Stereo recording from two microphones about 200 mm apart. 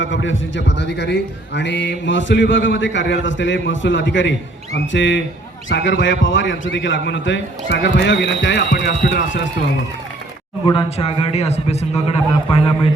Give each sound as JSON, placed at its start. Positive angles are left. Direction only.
{"t": 0.0, "sound": "speech", "side_deg": 65}
{"t": 10.7, "sound": "a man's voice", "side_deg": 30}